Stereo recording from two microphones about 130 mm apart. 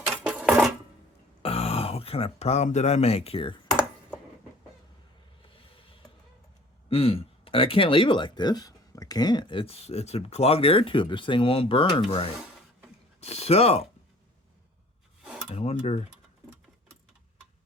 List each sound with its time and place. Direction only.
0.2 s dishes: 10° right (ahead or behind)
1.4 s speech: 50° left (ahead or behind)
5.5 s a sound: 45° left (ahead or behind)
6.9 s speech: 45° left (ahead or behind)
15.2 s a sound: 5° right (ahead or behind)
15.4 s speech: 50° left (ahead or behind)